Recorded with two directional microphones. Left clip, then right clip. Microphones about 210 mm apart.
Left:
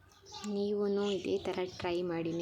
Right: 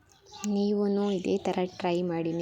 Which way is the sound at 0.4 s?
25° right (ahead or behind).